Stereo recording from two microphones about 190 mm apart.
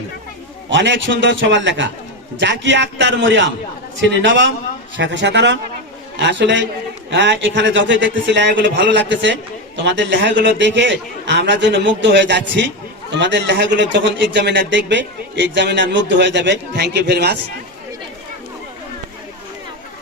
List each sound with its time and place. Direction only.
0.7 s a man's voice: 70° right (ahead or behind)